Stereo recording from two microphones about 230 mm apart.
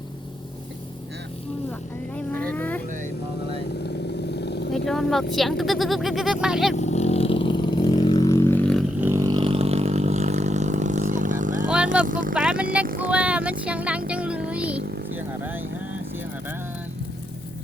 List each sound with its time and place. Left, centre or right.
2.1 s vehicle: centre
4.4 s vehicle: left
4.9 s speech: centre
6.7 s vehicle: left; by 8.8 s centre
9.0 s a sound: centre; by 11.7 s right
12.0 s speech: right
12.3 s speech: centre
14.1 s music: centre
14.5 s a sound: centre
14.8 s a sound: right
15.1 s vehicle: centre